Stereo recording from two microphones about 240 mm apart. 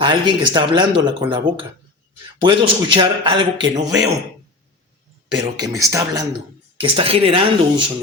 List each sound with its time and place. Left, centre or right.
0.0 s a man's voice: centre
5.5 s a man's voice: centre